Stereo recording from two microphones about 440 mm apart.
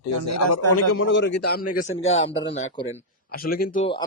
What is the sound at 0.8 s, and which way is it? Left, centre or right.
A man's voice, left.